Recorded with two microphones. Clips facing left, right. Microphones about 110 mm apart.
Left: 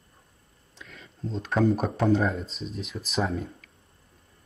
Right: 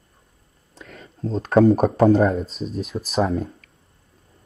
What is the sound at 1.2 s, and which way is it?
Speech, 45° right (ahead or behind).